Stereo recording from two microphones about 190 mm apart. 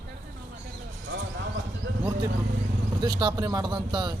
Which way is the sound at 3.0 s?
20° right (ahead or behind).